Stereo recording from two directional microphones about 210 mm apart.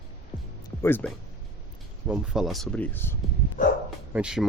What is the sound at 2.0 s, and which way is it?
Speech, 5° right (ahead or behind).